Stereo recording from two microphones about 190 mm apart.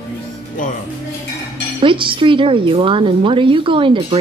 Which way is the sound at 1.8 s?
25° right (ahead or behind).